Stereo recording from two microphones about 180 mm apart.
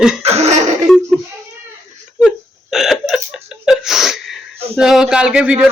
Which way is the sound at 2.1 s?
Centre (ahead or behind).